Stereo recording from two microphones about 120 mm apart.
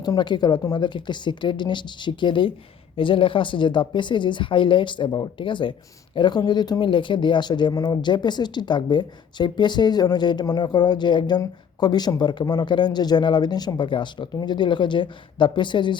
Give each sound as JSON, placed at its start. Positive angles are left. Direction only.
{"t": 0.0, "sound": "a woman's voice", "side_deg": 35}